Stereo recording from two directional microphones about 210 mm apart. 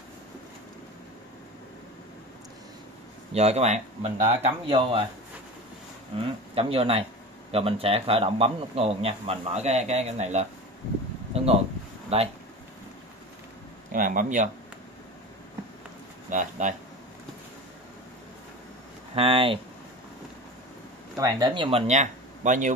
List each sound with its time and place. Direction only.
3.3 s speech: 30° right (ahead or behind)
6.1 s a man's voice: 25° right (ahead or behind)
13.9 s speech: 40° right (ahead or behind)
16.3 s speech: 35° right (ahead or behind)
19.1 s a man's voice: 25° right (ahead or behind)
21.2 s speech: 20° right (ahead or behind); by 22.7 s 35° right (ahead or behind)